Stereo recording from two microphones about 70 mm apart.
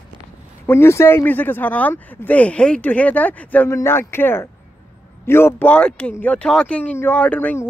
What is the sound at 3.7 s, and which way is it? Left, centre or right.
Speech, left.